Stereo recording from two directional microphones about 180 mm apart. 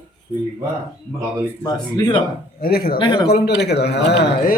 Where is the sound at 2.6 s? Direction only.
55° left (ahead or behind).